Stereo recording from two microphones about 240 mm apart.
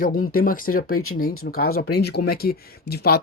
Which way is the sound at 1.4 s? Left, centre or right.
Left.